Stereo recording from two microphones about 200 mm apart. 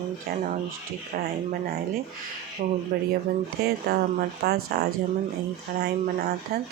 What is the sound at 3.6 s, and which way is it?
Speech, 50° right (ahead or behind).